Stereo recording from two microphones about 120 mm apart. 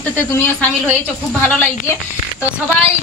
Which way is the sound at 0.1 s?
15° left (ahead or behind).